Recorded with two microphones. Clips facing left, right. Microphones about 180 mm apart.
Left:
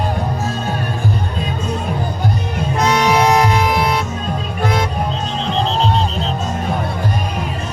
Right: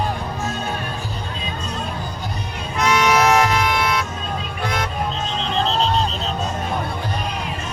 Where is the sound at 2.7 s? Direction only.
35° left (ahead or behind).